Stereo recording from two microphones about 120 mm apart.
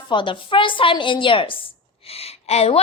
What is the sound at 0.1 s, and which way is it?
A woman's voice, 45° left (ahead or behind).